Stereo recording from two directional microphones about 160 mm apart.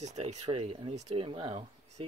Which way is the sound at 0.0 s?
45° right (ahead or behind).